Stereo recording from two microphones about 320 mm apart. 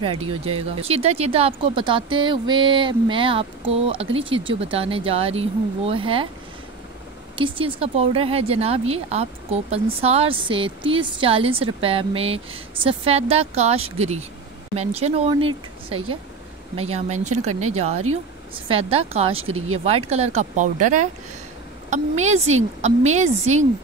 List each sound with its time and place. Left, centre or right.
0.0 s speech: centre
0.3 s speech: right
0.7 s speech: centre
7.3 s speech: centre